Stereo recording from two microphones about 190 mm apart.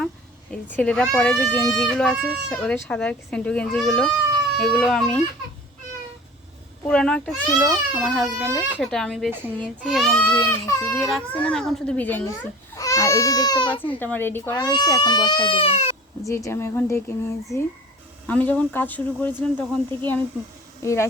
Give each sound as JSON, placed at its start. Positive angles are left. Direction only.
{"t": 0.5, "sound": "speech", "side_deg": 5}
{"t": 6.8, "sound": "speech", "side_deg": 5}
{"t": 8.8, "sound": "speech", "side_deg": 5}
{"t": 11.0, "sound": "speech", "side_deg": 5}
{"t": 13.8, "sound": "speech", "side_deg": 10}
{"t": 16.2, "sound": "speech", "side_deg": 15}